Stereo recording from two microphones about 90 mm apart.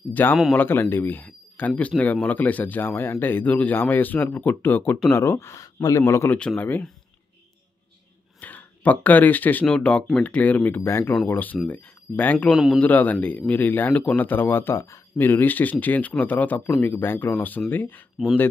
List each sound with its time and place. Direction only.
0.1 s speech: 20° left (ahead or behind)
6.3 s speech: 15° left (ahead or behind)
8.4 s speech: 20° left (ahead or behind)